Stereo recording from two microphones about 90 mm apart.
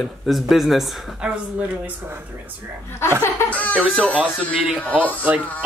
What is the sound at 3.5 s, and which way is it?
Giggle, 15° left (ahead or behind).